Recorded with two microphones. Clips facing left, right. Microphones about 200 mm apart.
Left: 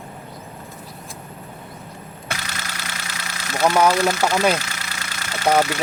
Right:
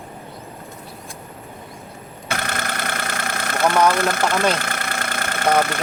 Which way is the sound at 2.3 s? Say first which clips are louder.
Right 7 dB; 55° right (ahead or behind).